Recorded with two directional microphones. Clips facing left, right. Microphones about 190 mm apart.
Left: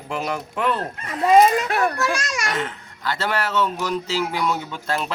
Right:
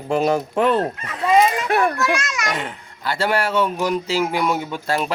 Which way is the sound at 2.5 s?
15° right (ahead or behind).